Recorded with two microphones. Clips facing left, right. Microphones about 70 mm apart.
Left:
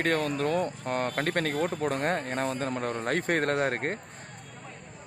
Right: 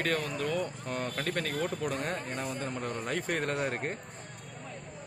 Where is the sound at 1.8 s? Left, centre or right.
Left.